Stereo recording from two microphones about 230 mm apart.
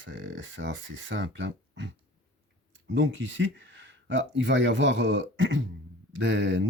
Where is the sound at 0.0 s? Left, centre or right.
Right.